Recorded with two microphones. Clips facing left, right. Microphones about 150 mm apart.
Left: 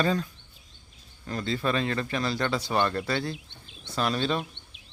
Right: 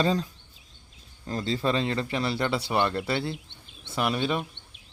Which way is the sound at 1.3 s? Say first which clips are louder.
Right 1 dB; 30° right (ahead or behind).